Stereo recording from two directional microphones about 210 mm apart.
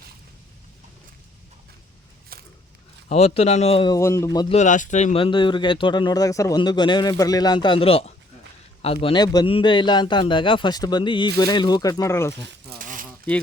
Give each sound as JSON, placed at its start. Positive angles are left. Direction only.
{"t": 2.3, "sound": "a sound", "side_deg": -45}
{"t": 3.1, "sound": "speech", "side_deg": 30}
{"t": 4.5, "sound": "speech", "side_deg": 35}
{"t": 12.8, "sound": "zipper", "side_deg": -40}